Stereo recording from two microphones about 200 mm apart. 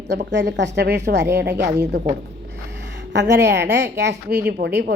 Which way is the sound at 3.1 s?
60° right (ahead or behind).